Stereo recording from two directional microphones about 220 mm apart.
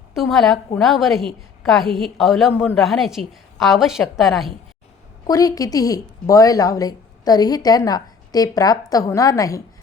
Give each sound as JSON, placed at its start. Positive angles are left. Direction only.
{"t": 0.2, "sound": "a woman's voice", "side_deg": 0}
{"t": 5.2, "sound": "a woman's voice", "side_deg": 15}